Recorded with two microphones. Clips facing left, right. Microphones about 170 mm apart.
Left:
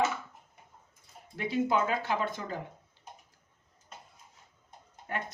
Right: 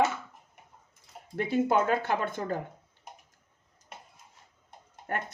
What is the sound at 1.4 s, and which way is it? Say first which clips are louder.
Speech: right 3 dB; 50° right (ahead or behind).